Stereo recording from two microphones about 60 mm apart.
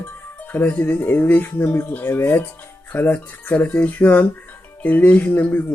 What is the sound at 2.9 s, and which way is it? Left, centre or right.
Speech, left.